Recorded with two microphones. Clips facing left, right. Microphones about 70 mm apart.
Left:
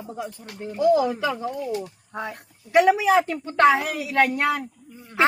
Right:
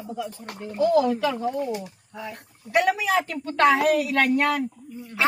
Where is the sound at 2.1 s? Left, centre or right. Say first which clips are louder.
Left 5 dB; left.